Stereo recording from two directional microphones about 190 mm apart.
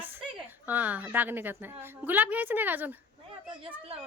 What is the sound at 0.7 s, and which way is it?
A woman's voice, 10° right (ahead or behind).